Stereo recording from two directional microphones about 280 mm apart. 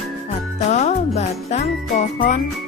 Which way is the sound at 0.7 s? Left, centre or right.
Left.